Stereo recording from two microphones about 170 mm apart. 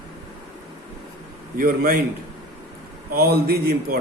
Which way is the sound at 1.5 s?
60° right (ahead or behind).